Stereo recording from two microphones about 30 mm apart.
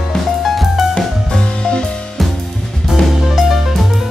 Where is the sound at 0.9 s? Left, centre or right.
Left.